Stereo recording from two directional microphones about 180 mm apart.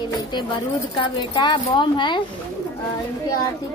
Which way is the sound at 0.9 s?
25° left (ahead or behind).